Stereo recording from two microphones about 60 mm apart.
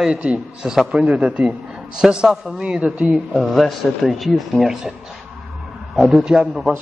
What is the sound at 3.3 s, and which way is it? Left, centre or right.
Speech, centre.